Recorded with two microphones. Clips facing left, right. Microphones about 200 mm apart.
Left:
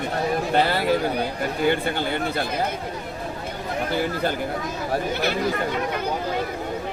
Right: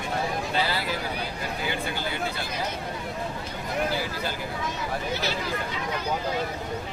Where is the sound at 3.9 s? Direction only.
55° left (ahead or behind).